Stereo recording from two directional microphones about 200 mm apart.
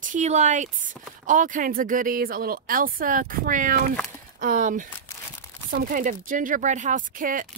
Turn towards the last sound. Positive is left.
turn(degrees=-45)  # may be behind; listen again after turning